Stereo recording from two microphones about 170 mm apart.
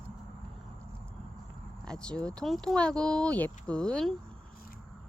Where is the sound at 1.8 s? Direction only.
5° left (ahead or behind).